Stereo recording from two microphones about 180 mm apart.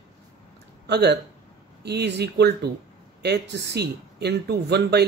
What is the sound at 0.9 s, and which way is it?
Speech, 70° right (ahead or behind).